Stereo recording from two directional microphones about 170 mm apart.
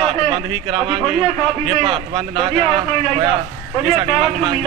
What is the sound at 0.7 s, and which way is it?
Speech, 30° right (ahead or behind).